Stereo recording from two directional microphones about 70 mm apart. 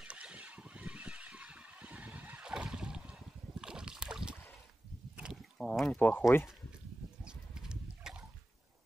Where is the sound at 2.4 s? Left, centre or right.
Centre.